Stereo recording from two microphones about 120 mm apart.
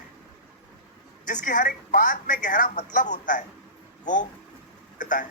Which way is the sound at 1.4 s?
90° left.